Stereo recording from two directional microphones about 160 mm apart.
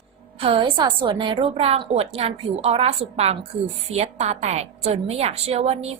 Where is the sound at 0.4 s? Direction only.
35° right (ahead or behind).